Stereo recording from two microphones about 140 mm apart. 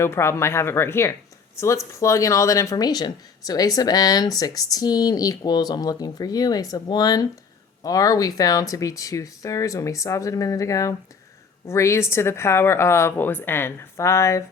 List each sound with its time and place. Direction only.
0.0 s speech: 20° left (ahead or behind)